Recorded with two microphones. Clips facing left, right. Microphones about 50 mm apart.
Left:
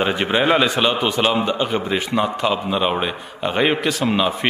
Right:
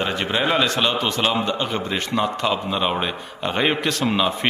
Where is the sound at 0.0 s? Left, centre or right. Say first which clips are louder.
Left 4 dB; centre.